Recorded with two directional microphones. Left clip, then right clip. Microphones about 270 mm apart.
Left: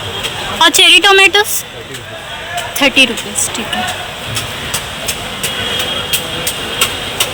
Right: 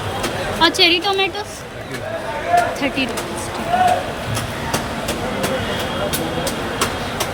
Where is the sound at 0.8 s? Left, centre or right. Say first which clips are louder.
Left 9 dB; centre.